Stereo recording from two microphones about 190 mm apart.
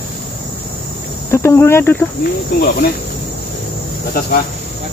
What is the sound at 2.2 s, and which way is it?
Cricket, 50° left (ahead or behind).